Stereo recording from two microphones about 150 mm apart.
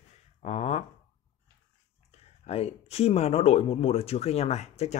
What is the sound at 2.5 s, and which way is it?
Speech, 45° left (ahead or behind).